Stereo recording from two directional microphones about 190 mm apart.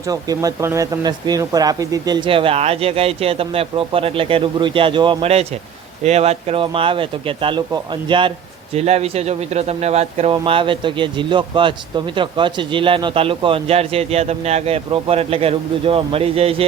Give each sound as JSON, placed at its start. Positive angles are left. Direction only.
{"t": 0.1, "sound": "speech", "side_deg": -20}